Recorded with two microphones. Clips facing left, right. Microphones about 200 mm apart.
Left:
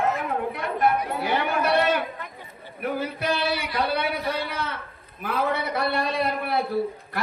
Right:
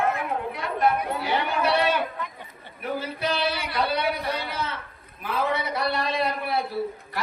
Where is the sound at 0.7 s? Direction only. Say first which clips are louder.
Even; 55° left (ahead or behind).